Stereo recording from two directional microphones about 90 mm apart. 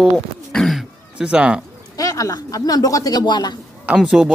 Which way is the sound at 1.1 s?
10° right (ahead or behind).